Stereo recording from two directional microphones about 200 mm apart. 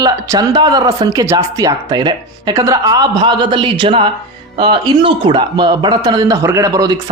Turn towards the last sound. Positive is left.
turn(degrees=-15)  # may be behind; listen again after turning